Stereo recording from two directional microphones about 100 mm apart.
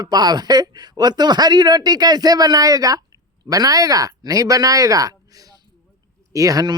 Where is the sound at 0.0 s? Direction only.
40° right (ahead or behind).